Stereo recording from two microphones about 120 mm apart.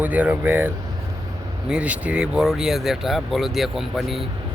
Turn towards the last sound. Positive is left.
turn(degrees=0)  # may be behind; listen again after turning